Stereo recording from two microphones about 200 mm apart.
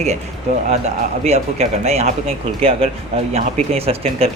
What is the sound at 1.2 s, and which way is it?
Speech, 30° right (ahead or behind).